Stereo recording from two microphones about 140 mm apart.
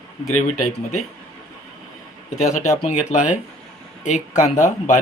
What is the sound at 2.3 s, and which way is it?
Speech, 60° left (ahead or behind).